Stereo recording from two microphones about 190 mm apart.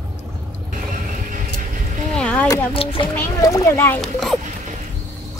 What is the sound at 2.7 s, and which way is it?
A child's voice, 30° left (ahead or behind).